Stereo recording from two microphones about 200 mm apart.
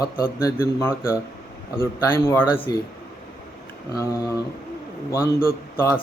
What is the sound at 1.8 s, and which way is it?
Speech, 10° left (ahead or behind).